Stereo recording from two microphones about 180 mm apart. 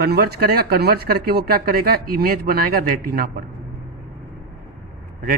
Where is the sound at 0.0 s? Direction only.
60° right (ahead or behind).